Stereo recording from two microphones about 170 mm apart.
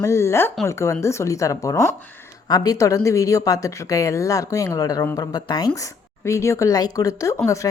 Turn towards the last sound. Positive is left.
turn(degrees=20)  # may be behind; listen again after turning